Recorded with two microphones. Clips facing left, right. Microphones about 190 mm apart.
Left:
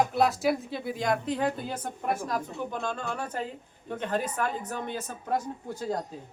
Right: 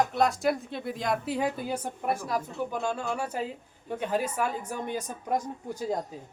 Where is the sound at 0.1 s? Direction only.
Centre (ahead or behind); by 5.4 s 15° right (ahead or behind).